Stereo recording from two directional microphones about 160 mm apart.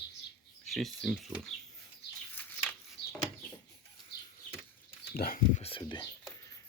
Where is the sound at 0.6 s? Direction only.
Centre (ahead or behind).